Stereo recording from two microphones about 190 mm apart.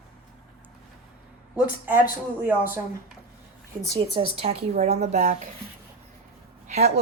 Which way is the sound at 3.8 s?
15° right (ahead or behind).